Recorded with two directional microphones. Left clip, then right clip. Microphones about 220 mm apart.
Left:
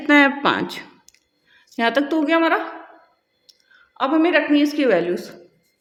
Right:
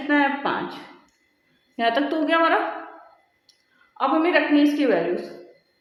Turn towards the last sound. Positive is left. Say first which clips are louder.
# left 3 dB
turn(degrees=40)  # may be behind; listen again after turning